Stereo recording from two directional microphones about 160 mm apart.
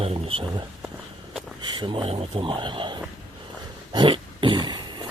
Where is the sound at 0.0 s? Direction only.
35° right (ahead or behind).